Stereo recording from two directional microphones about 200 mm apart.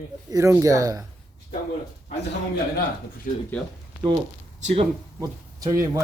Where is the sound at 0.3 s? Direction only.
15° right (ahead or behind).